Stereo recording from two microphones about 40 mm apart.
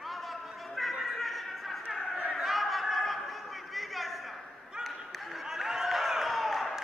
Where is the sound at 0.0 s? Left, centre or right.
Centre.